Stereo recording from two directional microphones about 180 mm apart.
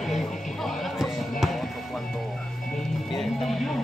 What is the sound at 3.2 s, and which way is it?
Speech, centre (ahead or behind).